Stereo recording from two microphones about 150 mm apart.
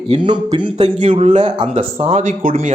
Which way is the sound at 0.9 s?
45° right (ahead or behind).